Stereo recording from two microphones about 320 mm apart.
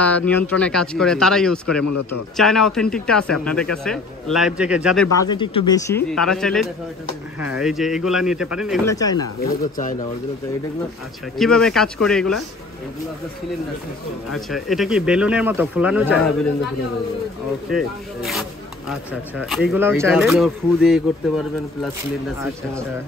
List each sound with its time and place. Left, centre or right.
0.0 s speech: centre
1.9 s a man's voice: left
2.3 s speech: centre
8.9 s speech: centre
11.3 s speech: centre
14.3 s speech: centre
17.6 s speech: centre